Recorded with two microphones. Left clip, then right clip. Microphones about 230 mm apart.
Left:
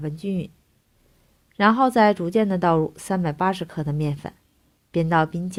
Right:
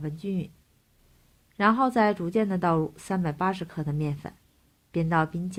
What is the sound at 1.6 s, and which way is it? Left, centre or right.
A woman's voice, left.